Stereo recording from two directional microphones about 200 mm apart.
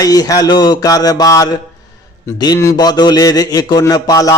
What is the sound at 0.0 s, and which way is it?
A man's voice, 20° left (ahead or behind).